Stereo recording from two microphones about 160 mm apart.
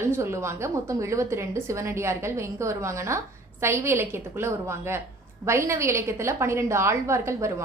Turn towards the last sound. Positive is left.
turn(degrees=-15)  # may be behind; listen again after turning